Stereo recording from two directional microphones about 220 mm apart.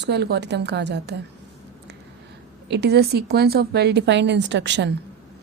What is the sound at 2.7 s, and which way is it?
A woman's voice, 50° right (ahead or behind).